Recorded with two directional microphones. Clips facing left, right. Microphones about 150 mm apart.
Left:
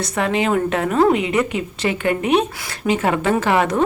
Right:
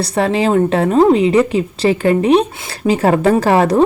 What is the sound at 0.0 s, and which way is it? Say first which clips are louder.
Speech: right 5 dB; 35° right (ahead or behind).